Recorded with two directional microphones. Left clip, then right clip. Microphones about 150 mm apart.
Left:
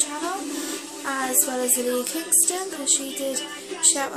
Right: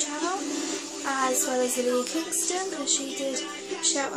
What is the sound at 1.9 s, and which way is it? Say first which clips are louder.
Music: left 2 dB; 10° left (ahead or behind).